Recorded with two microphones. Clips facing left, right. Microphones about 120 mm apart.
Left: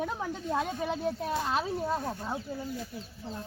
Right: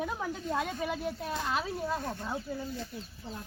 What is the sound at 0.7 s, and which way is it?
Speech, 35° left (ahead or behind).